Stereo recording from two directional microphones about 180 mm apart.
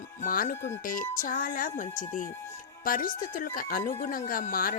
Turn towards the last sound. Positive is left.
turn(degrees=50)  # may be behind; listen again after turning